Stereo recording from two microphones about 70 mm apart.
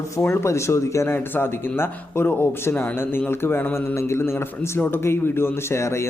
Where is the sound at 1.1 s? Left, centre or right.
Left.